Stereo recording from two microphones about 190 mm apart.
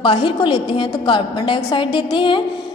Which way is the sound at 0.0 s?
25° left (ahead or behind).